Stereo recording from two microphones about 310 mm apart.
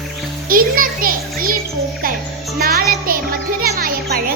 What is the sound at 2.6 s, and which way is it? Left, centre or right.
Music, right.